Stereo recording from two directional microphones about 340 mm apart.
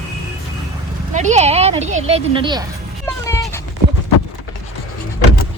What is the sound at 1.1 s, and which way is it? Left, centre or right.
Speech, centre.